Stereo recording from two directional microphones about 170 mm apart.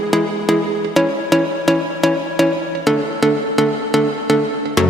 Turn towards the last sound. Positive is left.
turn(degrees=0)  # may be behind; listen again after turning